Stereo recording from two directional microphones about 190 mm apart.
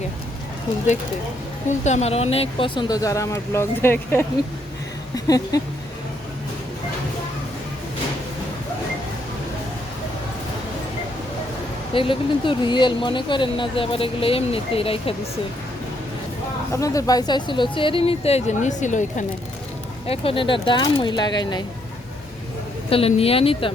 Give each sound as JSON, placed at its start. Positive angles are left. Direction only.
{"t": 1.8, "sound": "speech", "side_deg": 35}
{"t": 11.9, "sound": "speech", "side_deg": 25}
{"t": 16.7, "sound": "speech", "side_deg": 15}
{"t": 20.1, "sound": "speech", "side_deg": 30}
{"t": 22.9, "sound": "speech", "side_deg": 30}